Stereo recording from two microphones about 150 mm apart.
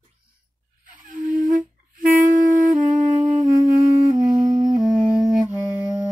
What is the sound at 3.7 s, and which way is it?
Music, 60° right (ahead or behind).